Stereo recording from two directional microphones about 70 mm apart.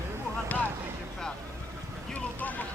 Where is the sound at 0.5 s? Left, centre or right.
Left.